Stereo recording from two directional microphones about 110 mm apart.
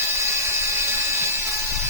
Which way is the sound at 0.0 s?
25° right (ahead or behind).